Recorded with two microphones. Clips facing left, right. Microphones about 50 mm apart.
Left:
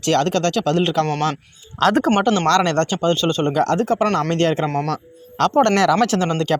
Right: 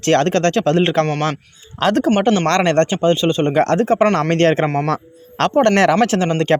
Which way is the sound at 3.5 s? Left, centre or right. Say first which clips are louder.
Right 3 dB; right.